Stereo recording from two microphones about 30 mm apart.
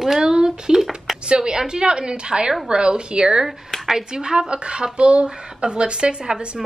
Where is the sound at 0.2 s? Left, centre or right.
Right.